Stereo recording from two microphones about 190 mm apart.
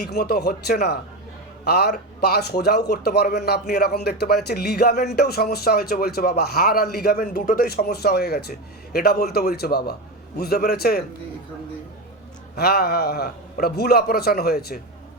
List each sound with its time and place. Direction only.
0.0 s a man's voice: 55° left (ahead or behind)
12.5 s a man's voice: 55° left (ahead or behind)